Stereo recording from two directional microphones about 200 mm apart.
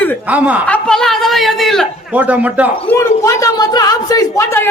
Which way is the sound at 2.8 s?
15° left (ahead or behind).